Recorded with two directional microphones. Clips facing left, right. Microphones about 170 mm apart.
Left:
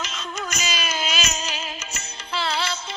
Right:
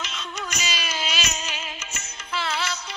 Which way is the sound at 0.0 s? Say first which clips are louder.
Left 2 dB; 45° left (ahead or behind).